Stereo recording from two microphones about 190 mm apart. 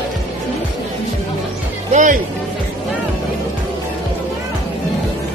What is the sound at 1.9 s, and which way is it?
Music, 40° right (ahead or behind).